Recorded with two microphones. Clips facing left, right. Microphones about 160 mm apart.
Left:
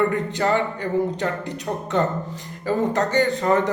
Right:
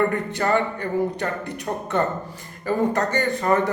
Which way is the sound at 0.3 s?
15° left (ahead or behind).